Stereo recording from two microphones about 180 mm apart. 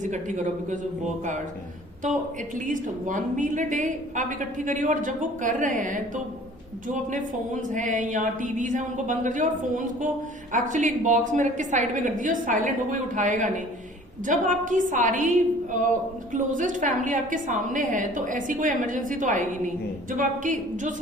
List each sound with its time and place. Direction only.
0.0 s a woman's voice: 45° right (ahead or behind)
2.6 s a woman's voice: 45° right (ahead or behind)
7.7 s a woman's voice: 45° right (ahead or behind)